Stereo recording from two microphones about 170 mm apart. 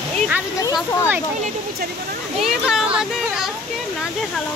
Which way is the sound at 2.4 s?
5° right (ahead or behind).